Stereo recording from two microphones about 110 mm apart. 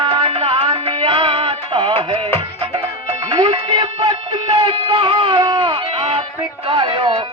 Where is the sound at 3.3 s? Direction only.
50° right (ahead or behind).